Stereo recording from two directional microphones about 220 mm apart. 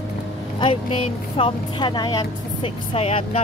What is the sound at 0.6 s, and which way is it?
Speech, 25° left (ahead or behind).